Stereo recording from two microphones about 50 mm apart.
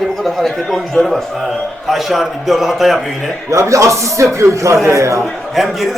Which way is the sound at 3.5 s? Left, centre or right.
Right.